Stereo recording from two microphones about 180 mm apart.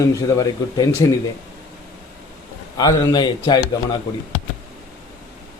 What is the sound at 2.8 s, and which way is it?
Speech, 20° left (ahead or behind).